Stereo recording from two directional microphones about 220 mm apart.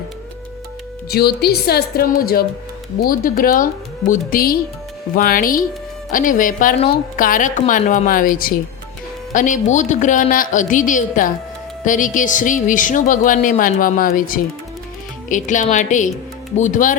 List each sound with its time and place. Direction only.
1.1 s a woman's voice: 45° left (ahead or behind)